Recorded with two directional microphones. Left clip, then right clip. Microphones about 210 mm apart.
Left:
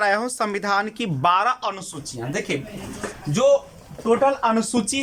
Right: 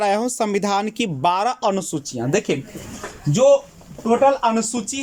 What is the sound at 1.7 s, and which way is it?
Speech, 40° right (ahead or behind).